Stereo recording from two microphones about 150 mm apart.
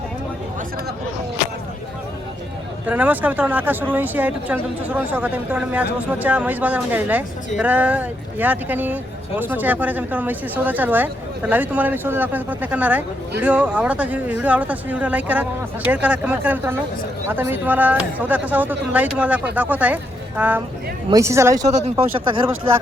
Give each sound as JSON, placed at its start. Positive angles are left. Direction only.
{"t": 2.8, "sound": "speech", "side_deg": -10}
{"t": 21.7, "sound": "speech", "side_deg": -45}